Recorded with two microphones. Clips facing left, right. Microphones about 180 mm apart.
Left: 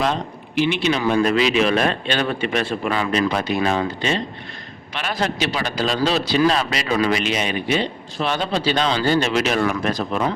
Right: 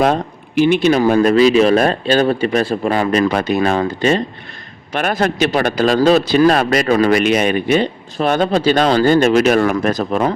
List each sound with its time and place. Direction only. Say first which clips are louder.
0.0 s a man's voice: right 7 dB; 50° right (ahead or behind)